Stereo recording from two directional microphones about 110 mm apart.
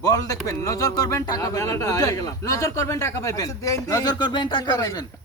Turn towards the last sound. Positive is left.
turn(degrees=35)  # may be behind; listen again after turning